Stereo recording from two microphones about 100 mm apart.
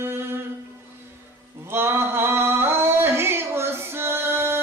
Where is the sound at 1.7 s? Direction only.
25° right (ahead or behind).